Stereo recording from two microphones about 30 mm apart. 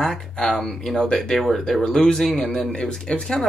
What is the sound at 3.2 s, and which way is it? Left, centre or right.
Speech, centre.